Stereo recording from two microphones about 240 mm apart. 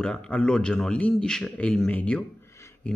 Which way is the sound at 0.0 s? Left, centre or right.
Centre.